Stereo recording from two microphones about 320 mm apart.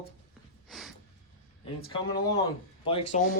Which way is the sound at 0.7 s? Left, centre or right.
Centre.